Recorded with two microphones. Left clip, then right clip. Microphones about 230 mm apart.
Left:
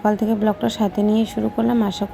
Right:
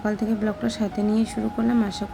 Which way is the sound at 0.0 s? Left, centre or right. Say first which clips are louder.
Left 7 dB; centre.